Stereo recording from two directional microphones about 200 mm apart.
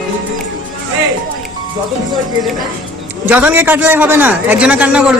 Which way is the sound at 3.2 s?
10° right (ahead or behind).